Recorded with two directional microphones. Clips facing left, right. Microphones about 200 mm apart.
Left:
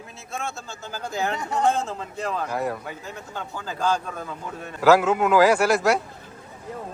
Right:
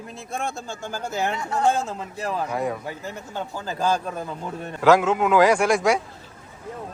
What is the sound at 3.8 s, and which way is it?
Speech, 10° right (ahead or behind).